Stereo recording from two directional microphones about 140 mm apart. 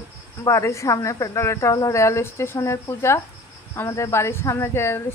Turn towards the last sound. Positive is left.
turn(degrees=20)  # may be behind; listen again after turning